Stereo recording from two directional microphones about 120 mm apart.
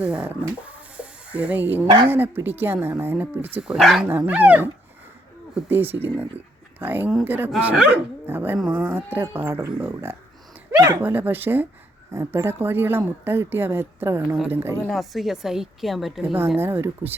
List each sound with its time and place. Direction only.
0.0 s speech: 10° right (ahead or behind)
0.9 s snake: 10° right (ahead or behind)
2.0 s speech: 15° right (ahead or behind)
3.6 s a woman's voice: centre (ahead or behind)
4.2 s speech: 10° right (ahead or behind)
10.8 s speech: 30° right (ahead or behind)
11.0 s speech: 15° right (ahead or behind)
14.8 s a woman's voice: centre (ahead or behind)
16.2 s speech: 15° right (ahead or behind)